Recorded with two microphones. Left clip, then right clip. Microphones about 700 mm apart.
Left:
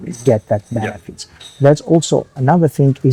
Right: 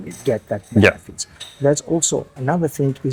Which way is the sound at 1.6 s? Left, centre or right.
Left.